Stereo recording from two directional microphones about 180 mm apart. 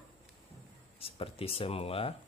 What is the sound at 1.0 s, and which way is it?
A man's voice, 30° left (ahead or behind).